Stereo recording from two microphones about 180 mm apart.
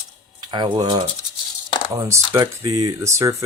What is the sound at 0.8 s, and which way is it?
Speech, 25° right (ahead or behind).